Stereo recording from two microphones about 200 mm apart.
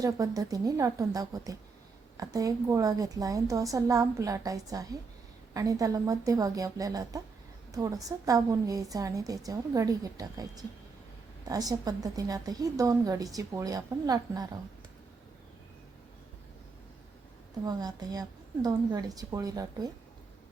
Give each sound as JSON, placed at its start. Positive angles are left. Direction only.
{"t": 0.0, "sound": "a woman's voice", "side_deg": -15}
{"t": 17.7, "sound": "a woman's voice", "side_deg": -20}